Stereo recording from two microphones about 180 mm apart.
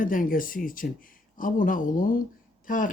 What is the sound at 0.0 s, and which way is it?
Speech, 50° left (ahead or behind).